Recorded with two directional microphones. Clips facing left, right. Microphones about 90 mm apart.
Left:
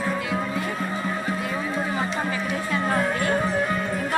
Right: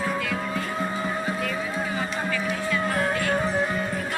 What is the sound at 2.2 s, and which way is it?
Music, 30° left (ahead or behind).